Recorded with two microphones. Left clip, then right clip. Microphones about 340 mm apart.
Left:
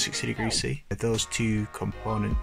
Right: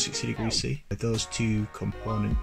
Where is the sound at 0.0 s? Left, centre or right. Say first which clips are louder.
Left 2 dB; left.